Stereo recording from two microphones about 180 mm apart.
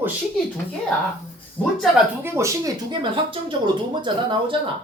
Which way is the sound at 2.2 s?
15° right (ahead or behind).